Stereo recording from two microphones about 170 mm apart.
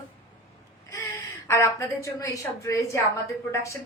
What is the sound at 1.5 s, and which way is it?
A woman's voice, 15° left (ahead or behind).